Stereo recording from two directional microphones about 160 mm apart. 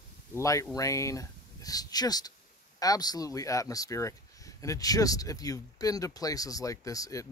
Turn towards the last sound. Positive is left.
turn(degrees=20)  # may be behind; listen again after turning